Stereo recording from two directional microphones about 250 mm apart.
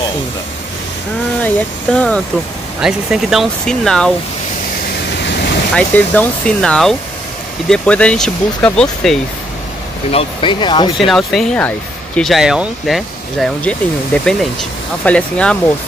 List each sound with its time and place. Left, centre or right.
1.4 s speech: centre
5.8 s speech: centre
10.1 s speech: centre
11.0 s speech: centre